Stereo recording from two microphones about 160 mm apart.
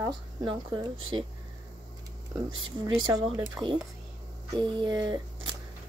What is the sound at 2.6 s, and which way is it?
Speech, 30° right (ahead or behind).